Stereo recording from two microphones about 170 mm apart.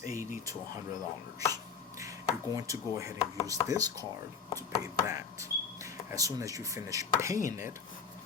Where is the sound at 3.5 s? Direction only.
20° right (ahead or behind).